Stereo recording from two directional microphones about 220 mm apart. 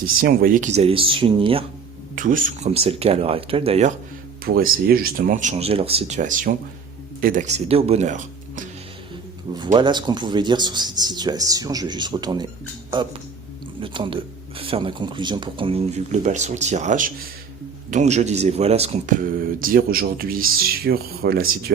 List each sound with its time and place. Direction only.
0.0 s speech: 40° right (ahead or behind); by 1.6 s 25° right (ahead or behind)
2.1 s speech: 40° right (ahead or behind)
4.4 s speech: 45° right (ahead or behind)
9.7 s speech: 20° right (ahead or behind)
13.8 s speech: 25° right (ahead or behind); by 21.4 s 45° right (ahead or behind)